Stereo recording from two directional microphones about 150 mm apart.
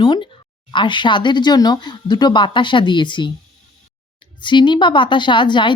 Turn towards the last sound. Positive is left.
turn(degrees=30)  # may be behind; listen again after turning